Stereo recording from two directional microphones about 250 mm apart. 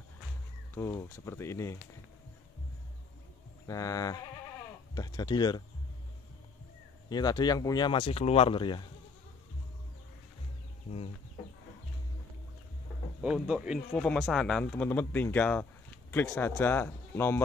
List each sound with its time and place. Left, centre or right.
0.7 s speech: centre
3.6 s speech: centre
7.1 s speech: centre
13.2 s speech: centre